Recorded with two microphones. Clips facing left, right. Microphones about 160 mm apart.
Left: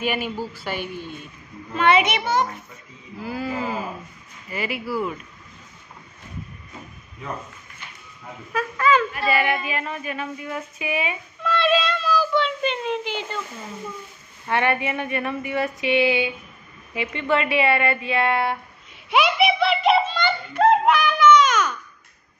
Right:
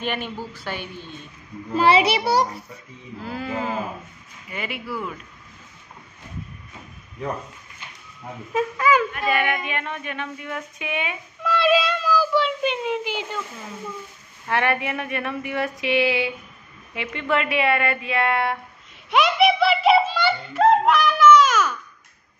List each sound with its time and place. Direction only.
0.0 s a woman's voice: 5° left (ahead or behind)
1.7 s a child's voice: 35° right (ahead or behind)
3.2 s speech: 5° left (ahead or behind)
8.5 s a sound: 10° right (ahead or behind)
9.1 s speech: 5° left (ahead or behind)
11.4 s speech: 10° right (ahead or behind)
14.5 s speech: centre (ahead or behind)
19.0 s a sound: centre (ahead or behind)